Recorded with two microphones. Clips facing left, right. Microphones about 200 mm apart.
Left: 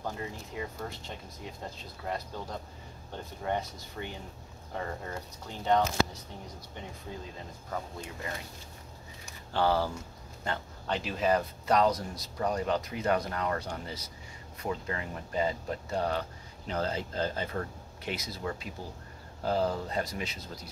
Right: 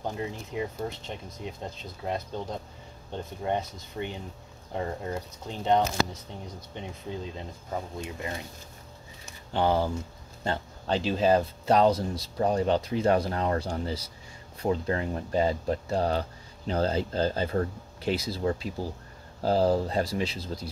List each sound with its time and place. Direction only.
0.0 s speech: 20° right (ahead or behind)
9.5 s speech: 20° right (ahead or behind)